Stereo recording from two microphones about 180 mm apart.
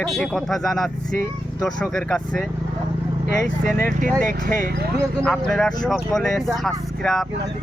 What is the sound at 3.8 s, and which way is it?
Speech, 45° right (ahead or behind).